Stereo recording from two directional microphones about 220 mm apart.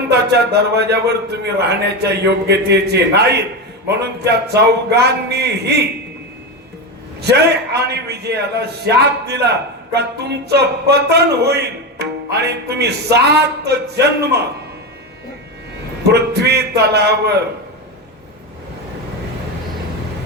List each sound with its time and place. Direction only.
0.1 s speech: 50° right (ahead or behind)
7.2 s speech: 50° right (ahead or behind)
16.0 s speech: 50° right (ahead or behind)